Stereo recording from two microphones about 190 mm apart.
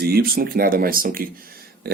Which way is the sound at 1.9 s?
55° right (ahead or behind).